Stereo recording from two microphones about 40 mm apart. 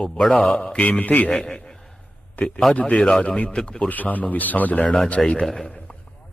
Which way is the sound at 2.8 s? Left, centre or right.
Left.